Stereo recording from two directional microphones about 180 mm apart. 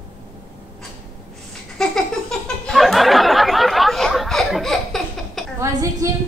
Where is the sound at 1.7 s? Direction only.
5° left (ahead or behind).